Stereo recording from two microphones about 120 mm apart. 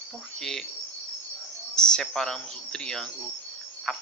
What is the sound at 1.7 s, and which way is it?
Speech, 5° left (ahead or behind).